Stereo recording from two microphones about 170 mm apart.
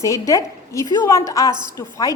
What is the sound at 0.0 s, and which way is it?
A woman's voice, 20° left (ahead or behind).